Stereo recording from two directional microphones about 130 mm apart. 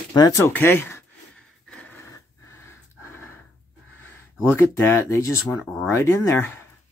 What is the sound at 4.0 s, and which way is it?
Speech, 25° left (ahead or behind).